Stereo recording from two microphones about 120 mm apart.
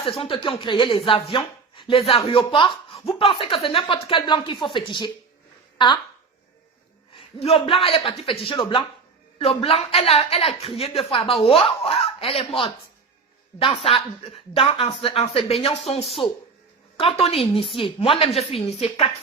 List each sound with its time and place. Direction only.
0.0 s a woman's voice: 50° left (ahead or behind)
7.1 s a woman's voice: 55° left (ahead or behind)
17.0 s a woman's voice: 55° left (ahead or behind)